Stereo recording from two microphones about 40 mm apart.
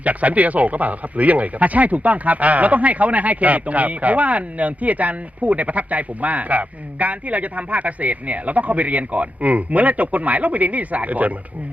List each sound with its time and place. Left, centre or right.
0.0 s speech: right